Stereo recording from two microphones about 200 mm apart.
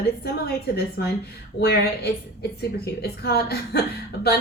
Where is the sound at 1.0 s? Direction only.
55° left (ahead or behind).